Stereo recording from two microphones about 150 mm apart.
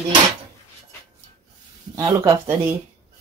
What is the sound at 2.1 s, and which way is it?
Speech, 20° right (ahead or behind).